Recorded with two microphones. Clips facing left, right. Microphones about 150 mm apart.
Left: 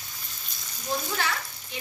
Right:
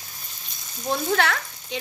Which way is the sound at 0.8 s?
70° right (ahead or behind).